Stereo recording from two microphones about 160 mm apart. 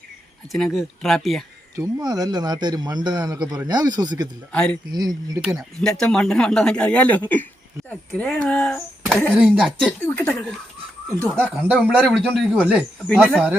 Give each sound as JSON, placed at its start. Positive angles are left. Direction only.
{"t": 0.5, "sound": "speech", "side_deg": 0}
{"t": 1.7, "sound": "a man's voice", "side_deg": -20}
{"t": 4.5, "sound": "speech", "side_deg": 5}
{"t": 4.9, "sound": "a man's voice", "side_deg": -25}
{"t": 5.5, "sound": "speech", "side_deg": 5}
{"t": 9.3, "sound": "speech", "side_deg": -5}
{"t": 10.1, "sound": "speech", "side_deg": 10}
{"t": 11.3, "sound": "speech", "side_deg": -10}